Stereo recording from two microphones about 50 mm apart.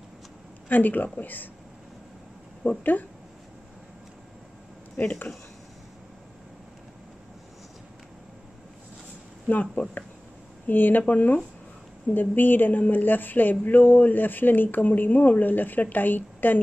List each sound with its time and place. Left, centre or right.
0.7 s a woman's voice: left
2.8 s a woman's voice: left
9.5 s a woman's voice: left